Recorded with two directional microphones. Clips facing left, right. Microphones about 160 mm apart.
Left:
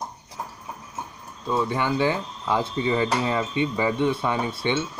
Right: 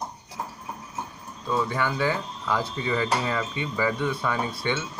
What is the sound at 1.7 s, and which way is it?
Speech, 20° left (ahead or behind).